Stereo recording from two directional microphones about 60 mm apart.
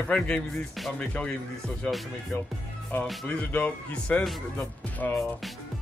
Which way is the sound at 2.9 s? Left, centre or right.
Left.